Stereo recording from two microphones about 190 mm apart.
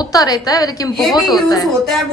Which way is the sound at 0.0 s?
20° left (ahead or behind).